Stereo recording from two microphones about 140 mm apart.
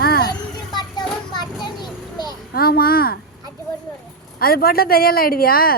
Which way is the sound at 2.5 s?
90° left.